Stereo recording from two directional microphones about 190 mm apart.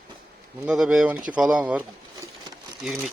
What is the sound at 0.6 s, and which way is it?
Speech, 5° right (ahead or behind).